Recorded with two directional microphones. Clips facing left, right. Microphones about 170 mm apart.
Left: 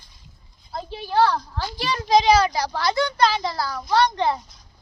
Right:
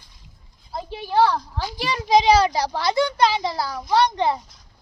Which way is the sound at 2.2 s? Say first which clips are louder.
Right 2 dB; 30° right (ahead or behind).